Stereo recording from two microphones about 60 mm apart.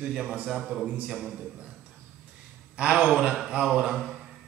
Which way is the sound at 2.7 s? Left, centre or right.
Centre.